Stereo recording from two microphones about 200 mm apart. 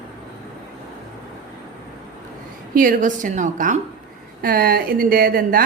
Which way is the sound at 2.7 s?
40° right (ahead or behind).